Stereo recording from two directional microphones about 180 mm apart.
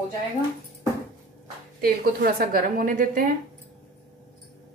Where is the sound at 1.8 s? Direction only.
55° right (ahead or behind).